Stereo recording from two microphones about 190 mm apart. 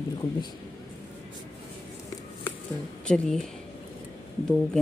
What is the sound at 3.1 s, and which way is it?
Speech, 5° left (ahead or behind).